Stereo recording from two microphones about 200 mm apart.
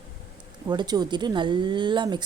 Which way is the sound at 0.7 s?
20° right (ahead or behind).